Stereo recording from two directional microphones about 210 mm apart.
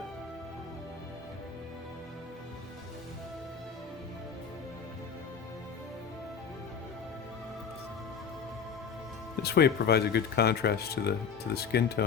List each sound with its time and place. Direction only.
9.4 s speech: 50° left (ahead or behind)